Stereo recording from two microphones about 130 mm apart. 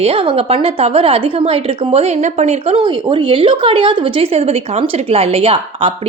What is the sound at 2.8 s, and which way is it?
Speech, 35° right (ahead or behind).